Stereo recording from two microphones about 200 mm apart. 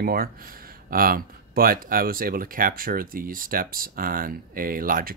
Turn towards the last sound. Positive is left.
turn(degrees=-45)  # may be behind; listen again after turning